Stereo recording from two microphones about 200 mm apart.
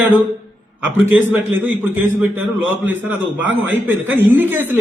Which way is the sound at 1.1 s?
10° right (ahead or behind).